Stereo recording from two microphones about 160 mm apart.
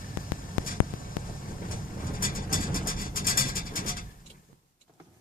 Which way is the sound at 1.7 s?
60° left (ahead or behind).